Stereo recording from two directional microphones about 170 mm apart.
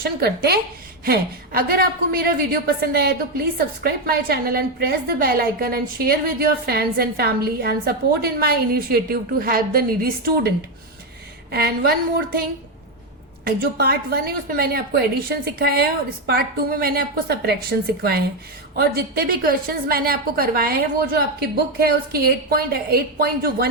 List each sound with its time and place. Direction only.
0.0 s a woman's voice: 70° right (ahead or behind)
11.5 s a woman's voice: 65° right (ahead or behind)
13.7 s a woman's voice: 65° right (ahead or behind)